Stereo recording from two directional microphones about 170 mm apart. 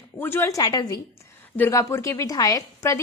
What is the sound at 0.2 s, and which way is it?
A woman's voice, 15° left (ahead or behind).